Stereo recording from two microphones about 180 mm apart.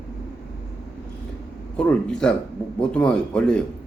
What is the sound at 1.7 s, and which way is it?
Speech, 5° left (ahead or behind).